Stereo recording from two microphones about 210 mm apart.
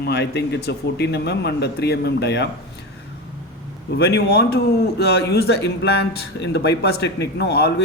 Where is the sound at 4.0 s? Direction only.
50° left (ahead or behind).